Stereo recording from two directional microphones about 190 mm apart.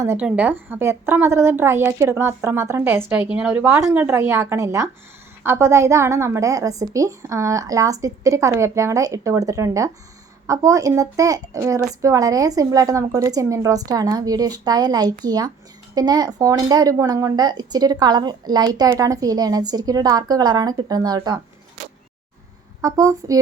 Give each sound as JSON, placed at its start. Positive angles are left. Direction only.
{"t": 0.0, "sound": "a woman's voice", "side_deg": -10}
{"t": 22.8, "sound": "speech", "side_deg": -20}